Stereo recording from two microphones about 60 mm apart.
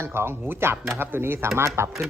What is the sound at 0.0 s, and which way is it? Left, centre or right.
A man's voice, right.